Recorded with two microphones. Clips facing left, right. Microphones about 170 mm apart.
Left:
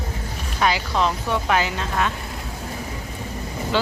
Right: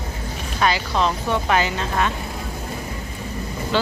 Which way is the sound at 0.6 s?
10° left (ahead or behind).